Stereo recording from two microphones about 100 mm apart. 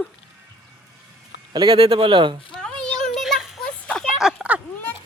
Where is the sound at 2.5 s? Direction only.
10° left (ahead or behind).